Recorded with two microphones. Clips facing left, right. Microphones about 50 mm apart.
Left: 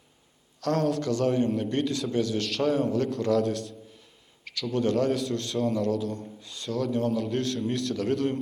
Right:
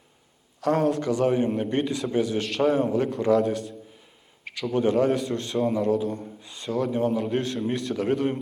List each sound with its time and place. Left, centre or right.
0.6 s a man's voice: centre
4.4 s a man's voice: right